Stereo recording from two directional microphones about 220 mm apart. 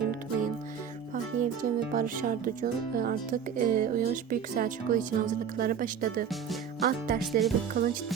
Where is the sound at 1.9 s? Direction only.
40° right (ahead or behind).